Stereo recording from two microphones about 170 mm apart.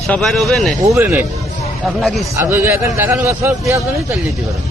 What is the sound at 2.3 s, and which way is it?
A man's voice, 15° right (ahead or behind).